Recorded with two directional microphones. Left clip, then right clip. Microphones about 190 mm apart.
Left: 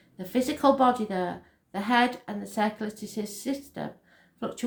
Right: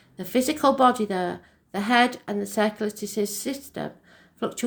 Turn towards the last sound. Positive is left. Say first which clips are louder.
# right 5 dB
turn(degrees=-45)  # may be behind; listen again after turning